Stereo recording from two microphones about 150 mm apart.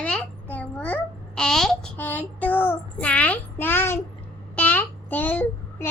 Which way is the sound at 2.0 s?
10° left (ahead or behind).